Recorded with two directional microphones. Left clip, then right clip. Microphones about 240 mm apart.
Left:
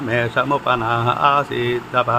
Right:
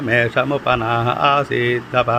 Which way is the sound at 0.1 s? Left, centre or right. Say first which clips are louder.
Right 2 dB; centre.